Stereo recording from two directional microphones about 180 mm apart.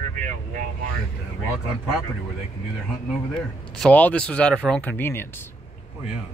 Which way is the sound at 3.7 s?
5° left (ahead or behind).